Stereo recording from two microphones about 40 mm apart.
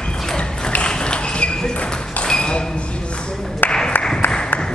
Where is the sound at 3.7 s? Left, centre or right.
Centre.